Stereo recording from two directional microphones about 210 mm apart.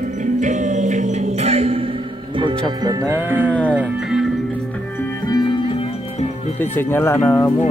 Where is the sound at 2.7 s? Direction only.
15° right (ahead or behind).